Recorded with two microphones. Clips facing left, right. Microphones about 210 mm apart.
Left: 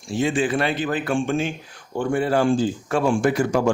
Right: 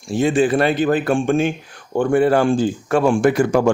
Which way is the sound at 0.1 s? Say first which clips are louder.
Right 5 dB; 45° right (ahead or behind).